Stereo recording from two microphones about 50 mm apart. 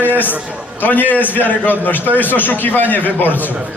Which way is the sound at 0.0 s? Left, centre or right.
Left.